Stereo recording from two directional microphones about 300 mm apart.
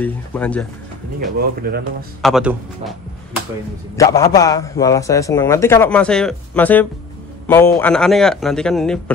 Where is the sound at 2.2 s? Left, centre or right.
Centre.